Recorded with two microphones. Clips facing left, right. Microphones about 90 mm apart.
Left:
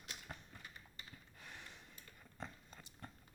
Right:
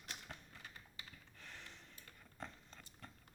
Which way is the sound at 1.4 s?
15° left (ahead or behind).